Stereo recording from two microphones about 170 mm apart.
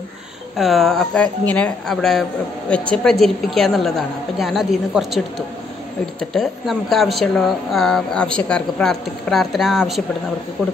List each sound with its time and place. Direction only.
0.6 s speech: centre (ahead or behind)
6.3 s speech: centre (ahead or behind)